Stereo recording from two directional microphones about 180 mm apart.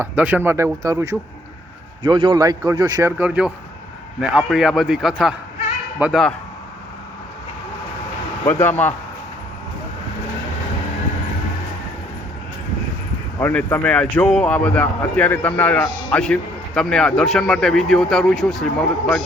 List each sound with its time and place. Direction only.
0.0 s a man's voice: 10° right (ahead or behind)
3.1 s speech: 10° right (ahead or behind)
8.4 s speech: 15° left (ahead or behind)
13.4 s speech: 10° left (ahead or behind)